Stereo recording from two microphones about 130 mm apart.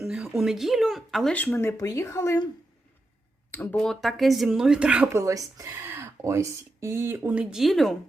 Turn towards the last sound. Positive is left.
turn(degrees=0)  # may be behind; listen again after turning